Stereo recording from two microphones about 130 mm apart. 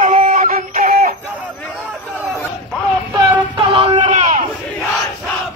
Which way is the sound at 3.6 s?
40° right (ahead or behind).